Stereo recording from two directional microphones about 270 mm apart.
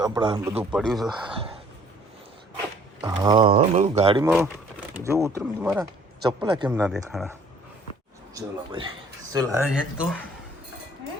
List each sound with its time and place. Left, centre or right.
0.0 s speech: centre
1.0 s speech: centre
3.0 s speech: centre
4.2 s speech: centre
8.4 s speech: centre